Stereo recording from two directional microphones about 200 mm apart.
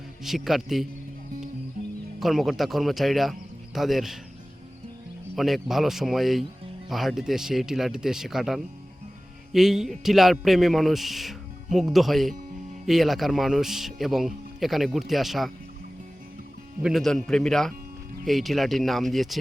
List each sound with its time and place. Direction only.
0.3 s a man's voice: centre (ahead or behind)
2.1 s a man's voice: centre (ahead or behind)
5.4 s a man's voice: centre (ahead or behind)
16.8 s a man's voice: centre (ahead or behind)